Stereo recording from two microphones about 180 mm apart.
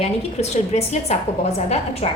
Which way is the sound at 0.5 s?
35° left (ahead or behind).